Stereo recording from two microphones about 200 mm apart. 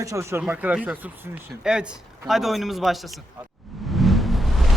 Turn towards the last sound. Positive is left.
turn(degrees=0)  # may be behind; listen again after turning